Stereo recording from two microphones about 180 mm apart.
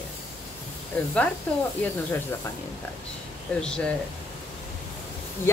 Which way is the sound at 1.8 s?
10° left (ahead or behind).